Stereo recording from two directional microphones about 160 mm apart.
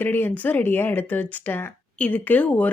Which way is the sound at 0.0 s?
10° left (ahead or behind).